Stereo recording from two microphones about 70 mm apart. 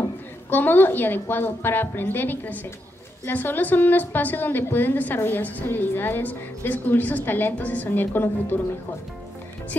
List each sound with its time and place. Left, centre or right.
0.5 s a woman's voice: left